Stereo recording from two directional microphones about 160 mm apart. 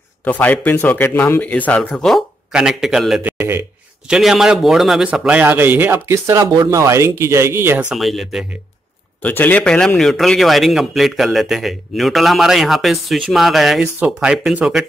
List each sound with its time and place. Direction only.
0.2 s speech: 10° left (ahead or behind)
3.3 s speech: 15° right (ahead or behind)
4.1 s a man's voice: 5° right (ahead or behind)
7.9 s a man's voice: centre (ahead or behind)
9.2 s a man's voice: 10° left (ahead or behind); by 14.9 s 5° right (ahead or behind)